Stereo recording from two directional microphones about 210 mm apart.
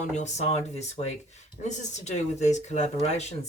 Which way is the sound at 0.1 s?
35° left (ahead or behind).